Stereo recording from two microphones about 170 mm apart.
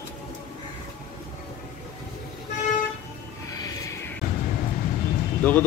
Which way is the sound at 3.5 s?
20° left (ahead or behind).